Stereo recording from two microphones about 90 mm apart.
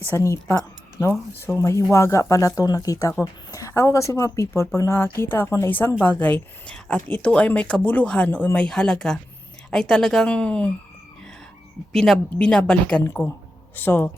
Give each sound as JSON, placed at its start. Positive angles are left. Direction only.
{"t": 0.0, "sound": "speech", "side_deg": 25}
{"t": 1.6, "sound": "a woman's voice", "side_deg": 30}
{"t": 11.9, "sound": "a woman's voice", "side_deg": 5}
{"t": 13.7, "sound": "speech", "side_deg": 20}